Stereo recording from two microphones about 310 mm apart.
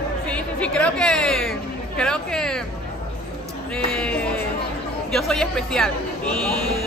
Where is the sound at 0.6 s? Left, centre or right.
Centre.